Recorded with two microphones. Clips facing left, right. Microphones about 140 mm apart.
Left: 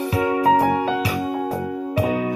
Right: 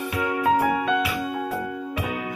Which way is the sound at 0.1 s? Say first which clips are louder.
Left 4 dB; 35° left (ahead or behind).